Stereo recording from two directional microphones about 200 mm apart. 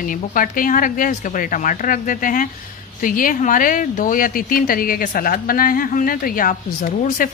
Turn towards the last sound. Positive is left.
turn(degrees=40)  # may be behind; listen again after turning